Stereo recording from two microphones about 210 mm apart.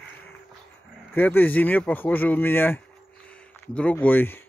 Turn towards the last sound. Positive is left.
turn(degrees=10)  # may be behind; listen again after turning